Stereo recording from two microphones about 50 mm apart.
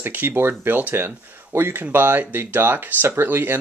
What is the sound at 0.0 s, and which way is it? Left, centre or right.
Speech, right.